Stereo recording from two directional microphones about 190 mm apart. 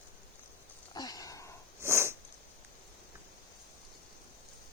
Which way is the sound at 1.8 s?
15° right (ahead or behind).